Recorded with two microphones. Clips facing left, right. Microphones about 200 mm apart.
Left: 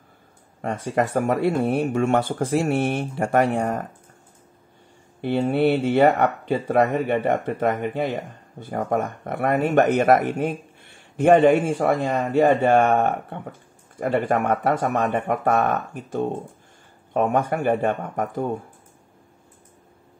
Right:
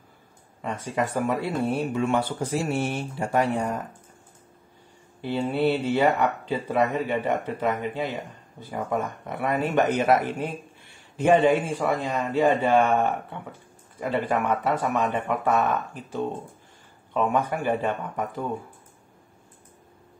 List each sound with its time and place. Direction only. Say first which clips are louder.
0.6 s speech: left 4 dB; 50° left (ahead or behind)
5.2 s speech: left 4 dB; 50° left (ahead or behind)